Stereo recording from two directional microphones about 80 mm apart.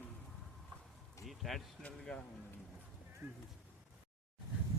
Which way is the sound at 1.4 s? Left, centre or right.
Centre.